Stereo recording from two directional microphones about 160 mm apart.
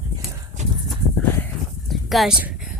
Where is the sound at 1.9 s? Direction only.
Centre (ahead or behind).